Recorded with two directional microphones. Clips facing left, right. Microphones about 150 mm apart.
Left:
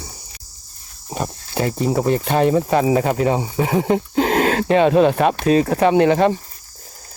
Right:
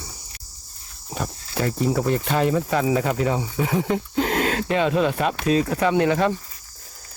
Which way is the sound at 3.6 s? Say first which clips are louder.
Left 5 dB; 60° left (ahead or behind).